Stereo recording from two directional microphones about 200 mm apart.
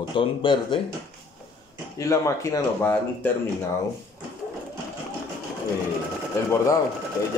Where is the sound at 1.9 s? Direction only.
15° left (ahead or behind).